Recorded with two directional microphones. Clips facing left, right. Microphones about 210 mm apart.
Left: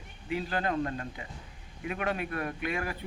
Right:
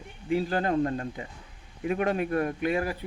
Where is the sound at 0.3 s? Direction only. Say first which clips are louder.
Right 5 dB; 40° right (ahead or behind).